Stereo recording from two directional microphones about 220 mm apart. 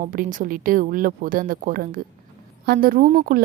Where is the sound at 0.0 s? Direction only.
35° right (ahead or behind).